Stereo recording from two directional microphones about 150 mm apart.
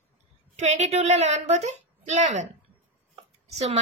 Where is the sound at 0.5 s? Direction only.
50° right (ahead or behind).